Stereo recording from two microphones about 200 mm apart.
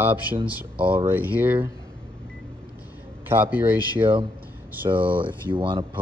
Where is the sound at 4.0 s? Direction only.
25° right (ahead or behind).